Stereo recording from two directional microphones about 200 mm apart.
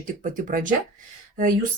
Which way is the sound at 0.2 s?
40° right (ahead or behind).